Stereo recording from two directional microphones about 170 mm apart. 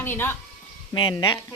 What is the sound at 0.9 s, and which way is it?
Speech, 30° left (ahead or behind).